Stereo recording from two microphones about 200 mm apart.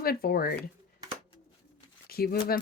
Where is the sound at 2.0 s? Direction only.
50° left (ahead or behind).